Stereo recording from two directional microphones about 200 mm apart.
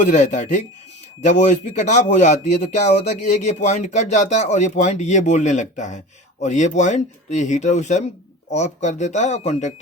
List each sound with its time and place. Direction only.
0.0 s speech: 35° left (ahead or behind)